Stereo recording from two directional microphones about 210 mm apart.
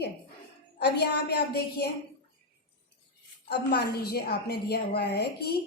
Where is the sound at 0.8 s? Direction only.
50° left (ahead or behind).